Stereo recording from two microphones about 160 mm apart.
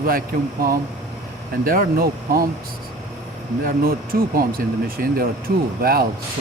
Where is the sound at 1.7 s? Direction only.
70° right (ahead or behind).